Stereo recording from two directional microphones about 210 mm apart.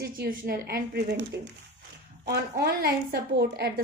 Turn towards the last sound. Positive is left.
turn(degrees=-45)  # may be behind; listen again after turning